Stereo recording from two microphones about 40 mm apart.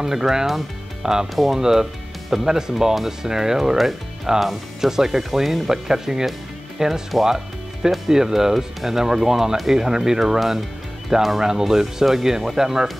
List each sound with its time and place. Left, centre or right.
0.0 s speech: centre
1.3 s speech: centre
1.6 s speech: centre